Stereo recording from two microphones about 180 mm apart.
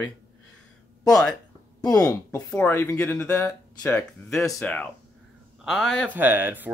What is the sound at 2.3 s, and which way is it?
Speech, 10° left (ahead or behind).